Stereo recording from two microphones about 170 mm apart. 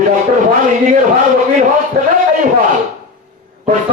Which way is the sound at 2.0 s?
50° right (ahead or behind).